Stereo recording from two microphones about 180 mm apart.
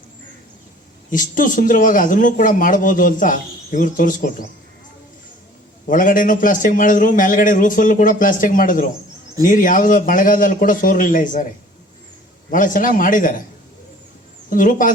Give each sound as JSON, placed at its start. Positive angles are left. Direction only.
{"t": 1.1, "sound": "speech", "side_deg": 45}
{"t": 5.8, "sound": "speech", "side_deg": 50}
{"t": 12.5, "sound": "speech", "side_deg": 50}
{"t": 14.5, "sound": "speech", "side_deg": 50}